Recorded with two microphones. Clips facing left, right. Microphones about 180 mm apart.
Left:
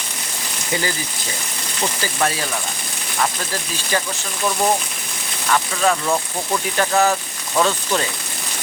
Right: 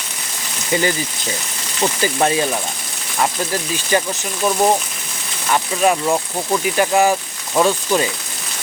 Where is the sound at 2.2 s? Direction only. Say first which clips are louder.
Right 4 dB; 25° right (ahead or behind).